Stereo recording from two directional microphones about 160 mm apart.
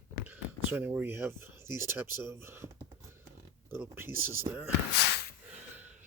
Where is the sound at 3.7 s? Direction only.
15° right (ahead or behind).